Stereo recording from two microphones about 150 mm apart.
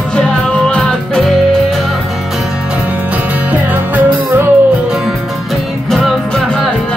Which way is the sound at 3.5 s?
10° right (ahead or behind).